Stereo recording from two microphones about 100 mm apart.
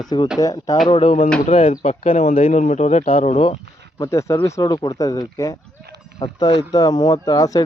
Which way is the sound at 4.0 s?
30° left (ahead or behind).